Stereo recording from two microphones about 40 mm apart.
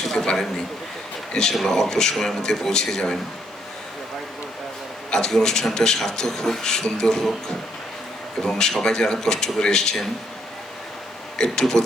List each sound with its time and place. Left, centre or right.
0.0 s a sound: centre
1.3 s speech: centre
5.1 s speech: centre
11.3 s speech: centre